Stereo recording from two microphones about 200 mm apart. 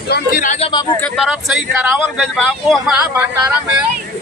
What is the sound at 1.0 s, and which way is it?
Speech, centre (ahead or behind).